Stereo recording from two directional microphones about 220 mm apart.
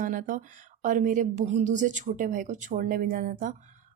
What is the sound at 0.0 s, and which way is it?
A woman's voice, 35° right (ahead or behind).